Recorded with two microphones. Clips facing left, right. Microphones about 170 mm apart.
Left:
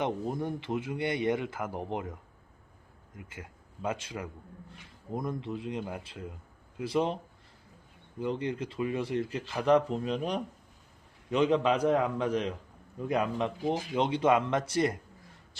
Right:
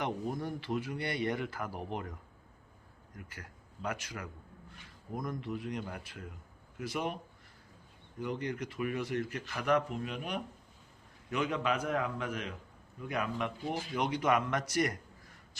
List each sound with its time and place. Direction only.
0.0 s a man's voice: 20° left (ahead or behind)
3.2 s a man's voice: 20° left (ahead or behind)
8.2 s a man's voice: 25° left (ahead or behind)